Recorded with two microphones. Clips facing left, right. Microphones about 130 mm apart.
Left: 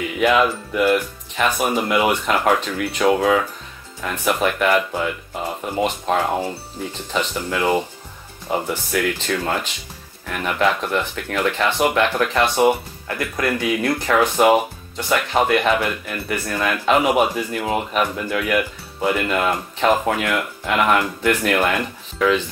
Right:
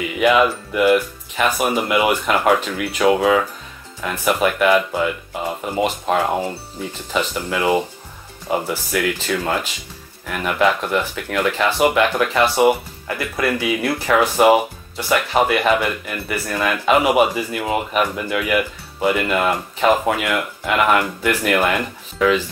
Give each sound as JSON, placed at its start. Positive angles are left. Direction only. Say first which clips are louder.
{"t": 0.2, "sound": "speech", "louder": "right 2 dB", "side_deg": -5}